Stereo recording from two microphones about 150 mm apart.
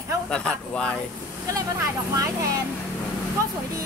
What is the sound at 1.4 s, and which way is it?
Speech, 20° right (ahead or behind).